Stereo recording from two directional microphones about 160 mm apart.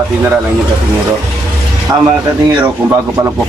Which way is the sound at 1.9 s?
15° right (ahead or behind).